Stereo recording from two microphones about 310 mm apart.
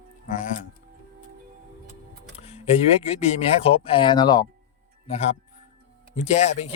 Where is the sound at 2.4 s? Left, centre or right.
Centre.